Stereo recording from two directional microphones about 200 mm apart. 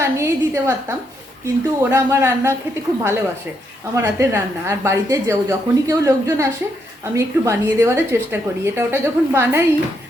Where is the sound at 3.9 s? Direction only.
15° right (ahead or behind).